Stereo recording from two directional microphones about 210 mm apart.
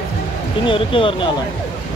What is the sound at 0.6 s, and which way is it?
Speech, 25° left (ahead or behind).